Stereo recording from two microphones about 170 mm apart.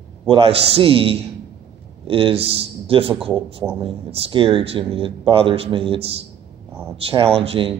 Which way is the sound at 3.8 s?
30° right (ahead or behind).